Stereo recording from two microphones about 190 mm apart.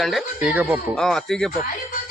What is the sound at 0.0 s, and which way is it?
Speech, centre (ahead or behind).